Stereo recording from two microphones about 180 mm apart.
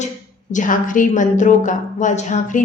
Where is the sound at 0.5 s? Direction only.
45° left (ahead or behind).